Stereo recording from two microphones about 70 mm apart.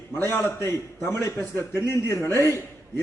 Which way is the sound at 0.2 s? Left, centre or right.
Left.